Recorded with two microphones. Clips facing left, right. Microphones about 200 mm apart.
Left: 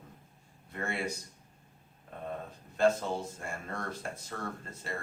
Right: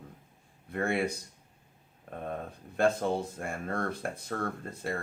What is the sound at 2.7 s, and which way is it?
Speech, 60° right (ahead or behind).